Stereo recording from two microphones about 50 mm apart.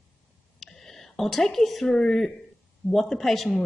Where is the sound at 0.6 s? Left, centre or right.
Centre.